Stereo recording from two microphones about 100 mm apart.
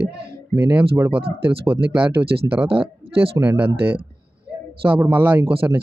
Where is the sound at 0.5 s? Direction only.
25° right (ahead or behind).